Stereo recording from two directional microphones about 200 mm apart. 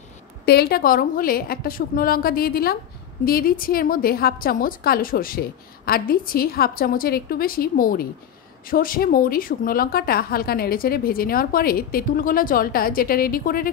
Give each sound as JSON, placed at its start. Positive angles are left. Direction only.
{"t": 0.5, "sound": "a woman's voice", "side_deg": 50}